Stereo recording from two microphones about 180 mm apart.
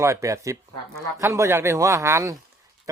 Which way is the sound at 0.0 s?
15° right (ahead or behind).